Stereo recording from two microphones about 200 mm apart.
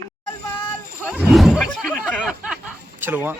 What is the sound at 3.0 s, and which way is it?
Speech, 10° right (ahead or behind).